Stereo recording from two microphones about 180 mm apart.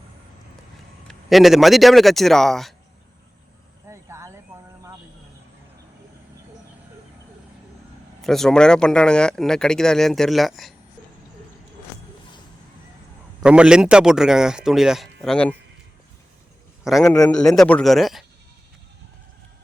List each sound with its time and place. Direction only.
1.0 s speech: centre (ahead or behind)
3.8 s a sound: 15° right (ahead or behind)
8.2 s speech: centre (ahead or behind)
13.4 s speech: 5° right (ahead or behind)
16.8 s a man's voice: centre (ahead or behind)
17.1 s speech: 10° left (ahead or behind)